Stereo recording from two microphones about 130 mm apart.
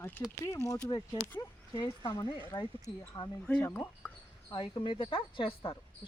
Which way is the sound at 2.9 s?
15° left (ahead or behind).